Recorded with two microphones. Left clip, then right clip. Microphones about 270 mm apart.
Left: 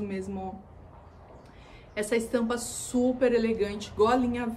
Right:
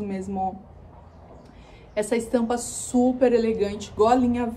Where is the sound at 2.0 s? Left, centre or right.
Centre.